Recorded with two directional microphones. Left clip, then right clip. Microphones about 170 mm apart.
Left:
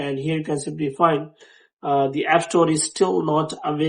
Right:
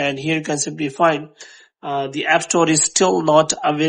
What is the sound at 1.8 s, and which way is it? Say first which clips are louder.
Speech: left 2 dB; 30° right (ahead or behind).